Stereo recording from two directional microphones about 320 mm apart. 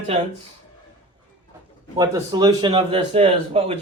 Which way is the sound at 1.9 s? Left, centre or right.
Centre.